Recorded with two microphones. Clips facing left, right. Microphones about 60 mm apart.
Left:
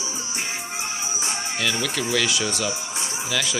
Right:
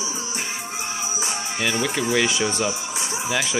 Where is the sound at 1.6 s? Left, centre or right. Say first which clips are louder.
Right 3 dB; right.